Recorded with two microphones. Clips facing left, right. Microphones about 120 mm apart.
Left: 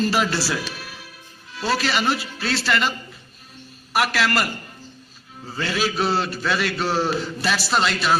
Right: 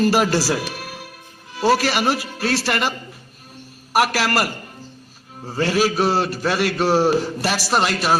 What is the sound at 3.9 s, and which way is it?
A man's voice, 40° right (ahead or behind).